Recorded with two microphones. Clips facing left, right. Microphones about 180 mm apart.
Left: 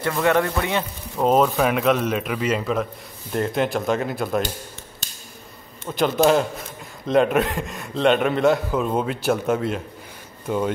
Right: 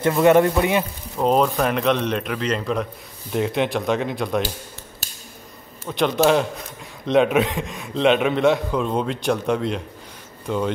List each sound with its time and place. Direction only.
0.0 s a man's voice: 20° right (ahead or behind)
1.1 s a man's voice: centre (ahead or behind)
5.9 s a man's voice: centre (ahead or behind)